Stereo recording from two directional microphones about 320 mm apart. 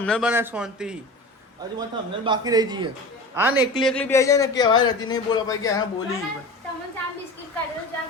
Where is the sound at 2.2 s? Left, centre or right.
Centre.